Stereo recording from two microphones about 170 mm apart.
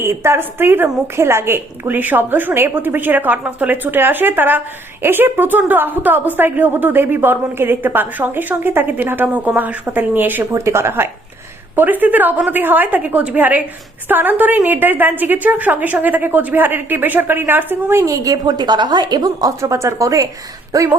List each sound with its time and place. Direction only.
0.0 s a woman's voice: 15° right (ahead or behind)